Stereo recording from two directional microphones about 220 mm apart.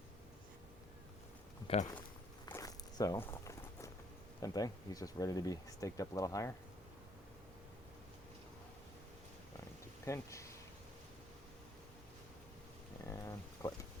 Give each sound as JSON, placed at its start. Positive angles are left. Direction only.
{"t": 1.6, "sound": "speech", "side_deg": 30}
{"t": 2.5, "sound": "walk", "side_deg": 15}
{"t": 4.4, "sound": "speech", "side_deg": 15}
{"t": 10.1, "sound": "speech", "side_deg": 15}
{"t": 13.1, "sound": "a sound", "side_deg": 15}